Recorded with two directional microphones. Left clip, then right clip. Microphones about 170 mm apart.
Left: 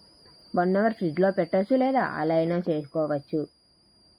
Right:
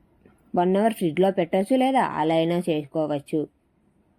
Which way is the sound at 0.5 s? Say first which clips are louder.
Right 2 dB; 35° right (ahead or behind).